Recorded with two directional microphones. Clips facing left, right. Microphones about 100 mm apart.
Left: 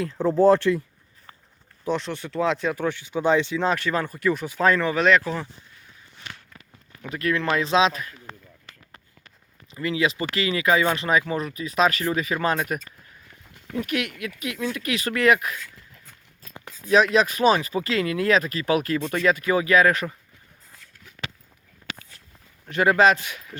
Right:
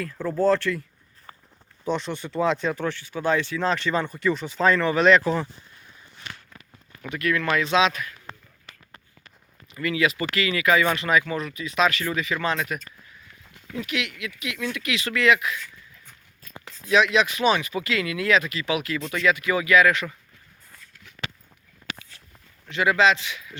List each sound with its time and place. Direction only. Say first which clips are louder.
0.0 s speech: left 5 dB; 20° left (ahead or behind)
1.8 s speech: left 1 dB; centre (ahead or behind)
7.1 s speech: even; 30° left (ahead or behind)
9.7 s speech: even; 30° left (ahead or behind); by 15.5 s 45° left (ahead or behind)
16.8 s speech: left 2 dB; 40° left (ahead or behind)
22.7 s speech: left 2 dB; 45° left (ahead or behind)